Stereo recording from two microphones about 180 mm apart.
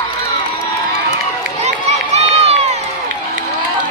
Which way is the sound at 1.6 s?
35° right (ahead or behind).